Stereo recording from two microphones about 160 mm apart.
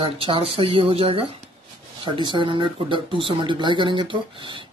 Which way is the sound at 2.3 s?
30° right (ahead or behind).